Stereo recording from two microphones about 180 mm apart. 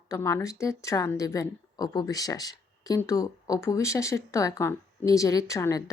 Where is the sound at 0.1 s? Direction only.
15° left (ahead or behind).